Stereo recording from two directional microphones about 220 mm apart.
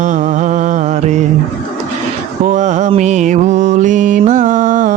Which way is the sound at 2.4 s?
30° right (ahead or behind).